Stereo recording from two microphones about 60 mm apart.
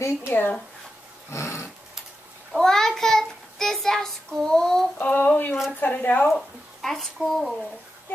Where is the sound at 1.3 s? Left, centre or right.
Left.